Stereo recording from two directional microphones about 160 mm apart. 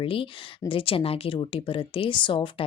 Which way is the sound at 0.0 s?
35° left (ahead or behind).